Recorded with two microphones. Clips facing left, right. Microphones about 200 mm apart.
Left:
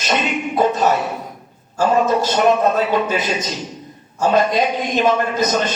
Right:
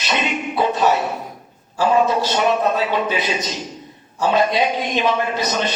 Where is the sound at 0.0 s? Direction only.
45° left (ahead or behind).